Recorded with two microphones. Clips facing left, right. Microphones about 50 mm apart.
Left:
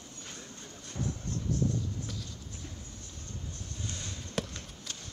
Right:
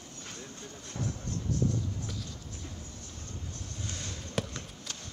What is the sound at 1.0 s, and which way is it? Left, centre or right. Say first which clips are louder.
Vehicle: left 1 dB; left.